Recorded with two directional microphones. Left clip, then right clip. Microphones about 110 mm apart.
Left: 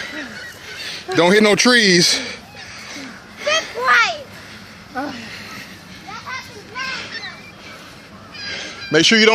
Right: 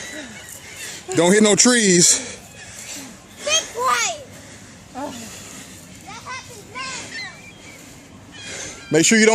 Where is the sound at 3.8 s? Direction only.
15° right (ahead or behind).